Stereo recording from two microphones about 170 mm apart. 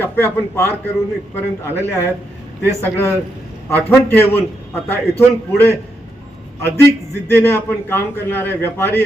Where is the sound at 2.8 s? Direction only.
15° left (ahead or behind).